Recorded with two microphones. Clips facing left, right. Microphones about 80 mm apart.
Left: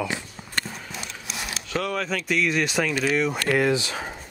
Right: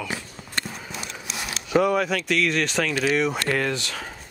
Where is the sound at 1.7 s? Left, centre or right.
Centre.